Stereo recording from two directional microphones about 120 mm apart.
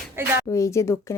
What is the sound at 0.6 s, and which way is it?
Speech, 25° left (ahead or behind).